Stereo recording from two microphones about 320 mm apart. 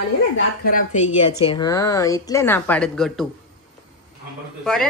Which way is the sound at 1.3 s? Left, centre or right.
Centre.